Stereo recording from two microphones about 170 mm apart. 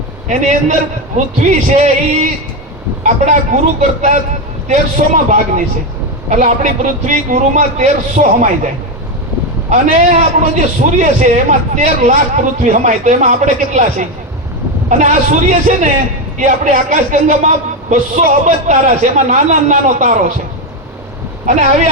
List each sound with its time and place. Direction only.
0.3 s a man's voice: 45° right (ahead or behind)
3.0 s a man's voice: 45° right (ahead or behind)